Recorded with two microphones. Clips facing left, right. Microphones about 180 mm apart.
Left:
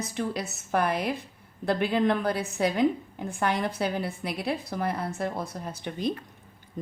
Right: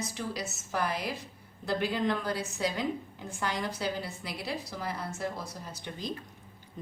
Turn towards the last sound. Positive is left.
turn(degrees=60)  # may be behind; listen again after turning